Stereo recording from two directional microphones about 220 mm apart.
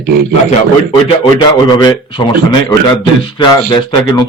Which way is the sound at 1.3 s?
20° left (ahead or behind).